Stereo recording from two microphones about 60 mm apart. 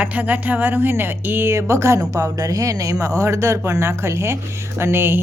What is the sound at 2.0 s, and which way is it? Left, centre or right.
Speech, right.